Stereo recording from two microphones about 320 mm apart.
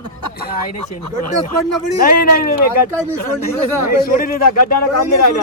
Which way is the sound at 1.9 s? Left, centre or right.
Left.